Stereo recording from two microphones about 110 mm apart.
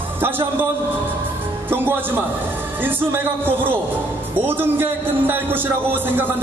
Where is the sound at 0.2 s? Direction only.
20° right (ahead or behind).